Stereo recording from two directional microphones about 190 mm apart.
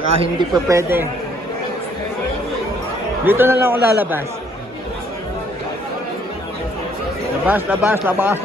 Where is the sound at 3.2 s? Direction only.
10° right (ahead or behind).